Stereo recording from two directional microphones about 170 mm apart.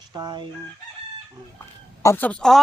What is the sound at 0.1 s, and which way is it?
Chicken, 25° right (ahead or behind).